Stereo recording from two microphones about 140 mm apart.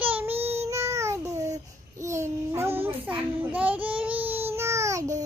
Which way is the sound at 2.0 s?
20° right (ahead or behind).